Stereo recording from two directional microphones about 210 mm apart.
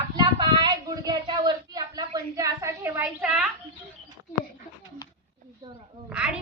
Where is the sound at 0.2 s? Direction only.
20° right (ahead or behind); by 3.5 s 5° right (ahead or behind).